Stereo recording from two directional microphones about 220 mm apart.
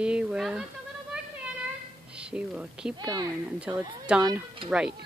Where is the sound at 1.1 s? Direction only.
5° right (ahead or behind).